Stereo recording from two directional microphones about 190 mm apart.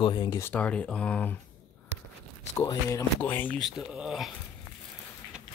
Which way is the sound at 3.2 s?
10° left (ahead or behind).